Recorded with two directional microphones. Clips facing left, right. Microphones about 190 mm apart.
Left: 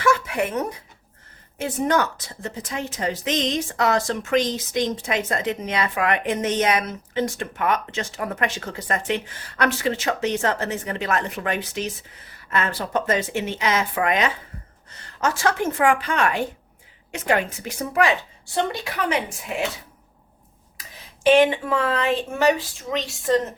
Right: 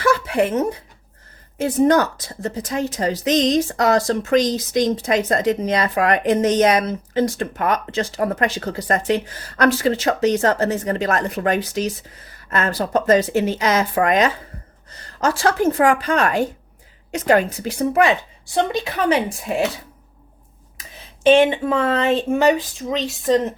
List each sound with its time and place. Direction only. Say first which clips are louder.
0.0 s a sound: right 4 dB; 35° right (ahead or behind)
1.5 s a woman's voice: right 6 dB; 40° right (ahead or behind); by 18.8 s 20° right (ahead or behind)
18.9 s a woman's voice: right 6 dB; 30° right (ahead or behind)
21.2 s speech: right 3 dB; 25° right (ahead or behind)